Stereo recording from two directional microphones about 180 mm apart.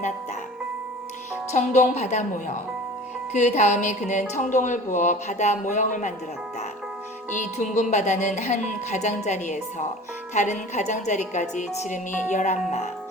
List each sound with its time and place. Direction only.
1.5 s speech: 40° left (ahead or behind)
3.3 s speech: 40° left (ahead or behind)
7.3 s speech: 40° left (ahead or behind)